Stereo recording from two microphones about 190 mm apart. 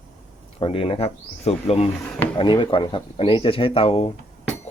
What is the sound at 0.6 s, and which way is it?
Speech, 30° left (ahead or behind).